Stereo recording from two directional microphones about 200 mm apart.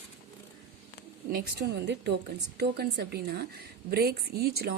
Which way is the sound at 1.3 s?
55° right (ahead or behind).